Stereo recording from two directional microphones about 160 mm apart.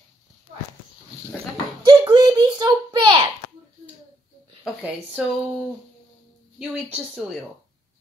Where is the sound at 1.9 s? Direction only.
25° right (ahead or behind).